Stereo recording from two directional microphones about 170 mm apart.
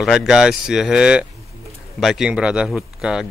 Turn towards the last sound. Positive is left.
turn(degrees=0)  # may be behind; listen again after turning